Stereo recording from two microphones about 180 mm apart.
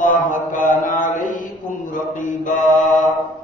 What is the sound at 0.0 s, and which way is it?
Mantra, 45° left (ahead or behind).